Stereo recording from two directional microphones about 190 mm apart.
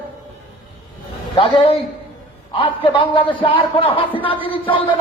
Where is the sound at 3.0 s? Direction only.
25° left (ahead or behind).